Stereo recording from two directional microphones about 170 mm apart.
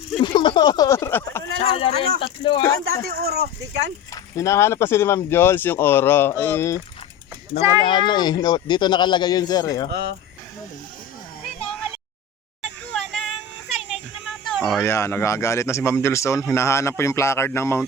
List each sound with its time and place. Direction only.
0.2 s speech: 30° left (ahead or behind)
1.7 s speech: 35° left (ahead or behind)
3.1 s speech: 65° right (ahead or behind)
4.1 s speech: 20° left (ahead or behind)
7.8 s speech: 30° left (ahead or behind)
9.9 s speech: 85° right
12.6 s a sound: 5° left (ahead or behind)
14.8 s speech: 15° left (ahead or behind)